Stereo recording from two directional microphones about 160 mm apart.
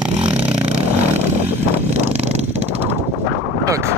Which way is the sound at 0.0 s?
5° right (ahead or behind).